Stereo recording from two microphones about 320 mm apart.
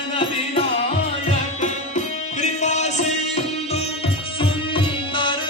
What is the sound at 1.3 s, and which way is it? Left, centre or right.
Music, left.